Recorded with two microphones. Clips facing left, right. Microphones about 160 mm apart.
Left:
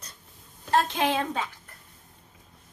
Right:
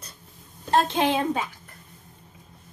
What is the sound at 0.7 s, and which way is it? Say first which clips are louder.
Speech: right 3 dB; 25° right (ahead or behind).